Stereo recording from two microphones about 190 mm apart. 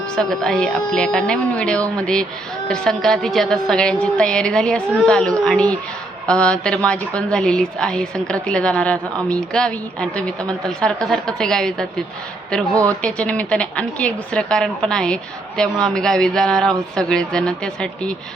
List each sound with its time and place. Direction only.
0.2 s a woman's voice: 5° left (ahead or behind)